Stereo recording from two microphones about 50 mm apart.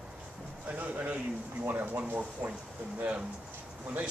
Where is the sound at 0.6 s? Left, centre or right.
Right.